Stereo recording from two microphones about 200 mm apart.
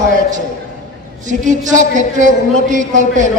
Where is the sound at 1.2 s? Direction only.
40° right (ahead or behind).